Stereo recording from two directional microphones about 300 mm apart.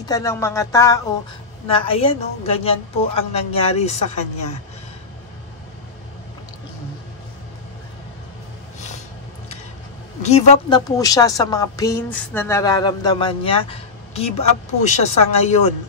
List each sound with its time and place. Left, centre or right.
0.1 s a woman's voice: centre
10.2 s a woman's voice: left